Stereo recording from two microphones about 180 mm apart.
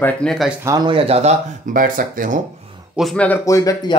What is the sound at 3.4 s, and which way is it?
Speech, 20° left (ahead or behind).